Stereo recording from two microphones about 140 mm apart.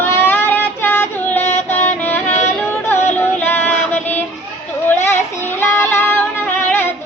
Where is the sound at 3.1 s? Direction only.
15° left (ahead or behind).